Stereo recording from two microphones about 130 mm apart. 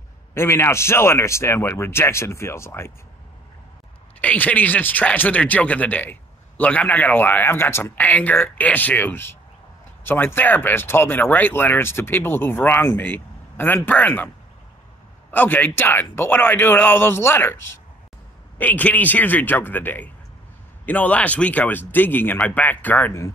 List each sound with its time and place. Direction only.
0.3 s speech: 20° left (ahead or behind)
4.2 s speech: 10° left (ahead or behind)
15.3 s speech: 15° left (ahead or behind)